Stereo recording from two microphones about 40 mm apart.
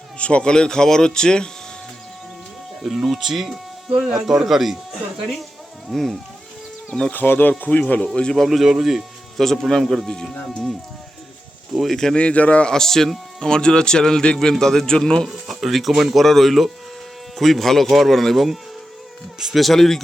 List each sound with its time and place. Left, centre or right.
0.2 s speech: left
2.8 s speech: centre
3.9 s speech: right
4.3 s speech: centre
7.1 s speech: left
7.6 s speech: left
8.1 s speech: left
8.4 s speech: centre
9.4 s speech: centre
10.1 s a man's voice: centre
11.8 s a man's voice: centre
12.1 s speech: left
12.6 s a man's voice: centre
15.3 s speech: centre